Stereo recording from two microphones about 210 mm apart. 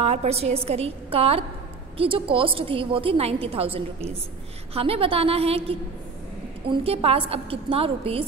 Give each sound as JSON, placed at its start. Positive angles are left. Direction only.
{"t": 0.0, "sound": "a woman's voice", "side_deg": -30}